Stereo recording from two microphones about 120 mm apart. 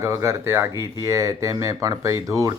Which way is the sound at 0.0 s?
25° right (ahead or behind).